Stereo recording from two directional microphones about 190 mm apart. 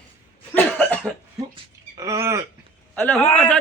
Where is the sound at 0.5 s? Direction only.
10° left (ahead or behind).